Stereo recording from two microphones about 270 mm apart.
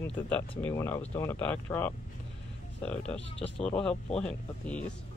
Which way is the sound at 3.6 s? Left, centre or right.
Centre.